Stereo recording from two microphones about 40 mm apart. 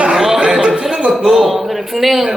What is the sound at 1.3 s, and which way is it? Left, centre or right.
A man's voice, centre.